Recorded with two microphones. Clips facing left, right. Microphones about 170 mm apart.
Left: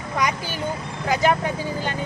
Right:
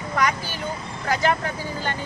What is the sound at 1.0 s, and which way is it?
Speech, 15° left (ahead or behind).